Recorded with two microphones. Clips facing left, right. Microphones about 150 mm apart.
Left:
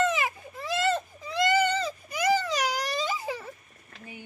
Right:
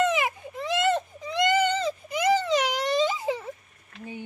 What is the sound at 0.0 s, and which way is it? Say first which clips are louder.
Baby cry: right 2 dB; 15° right (ahead or behind).